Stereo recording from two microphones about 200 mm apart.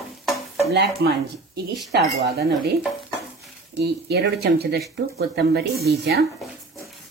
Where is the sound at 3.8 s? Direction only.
55° right (ahead or behind).